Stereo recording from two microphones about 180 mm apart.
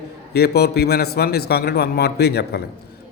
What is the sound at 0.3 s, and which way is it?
A man's voice, 65° left (ahead or behind).